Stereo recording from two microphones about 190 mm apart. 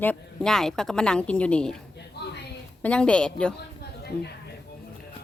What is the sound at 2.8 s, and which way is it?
Speech, 5° left (ahead or behind).